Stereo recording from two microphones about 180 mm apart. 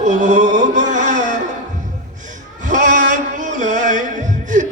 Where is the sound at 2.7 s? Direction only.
45° right (ahead or behind).